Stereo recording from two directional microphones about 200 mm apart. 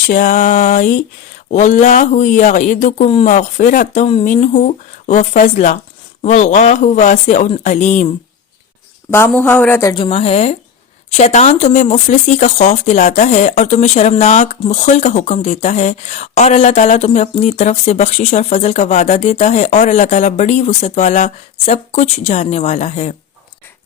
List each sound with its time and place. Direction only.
0.1 s speech: 40° left (ahead or behind)
9.0 s speech: 10° left (ahead or behind)
9.9 s speech: 25° left (ahead or behind)